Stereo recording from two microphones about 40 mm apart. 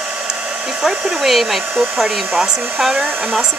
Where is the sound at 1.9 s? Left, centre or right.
Centre.